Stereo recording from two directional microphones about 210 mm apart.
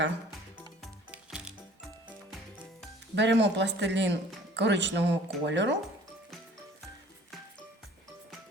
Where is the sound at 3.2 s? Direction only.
55° right (ahead or behind).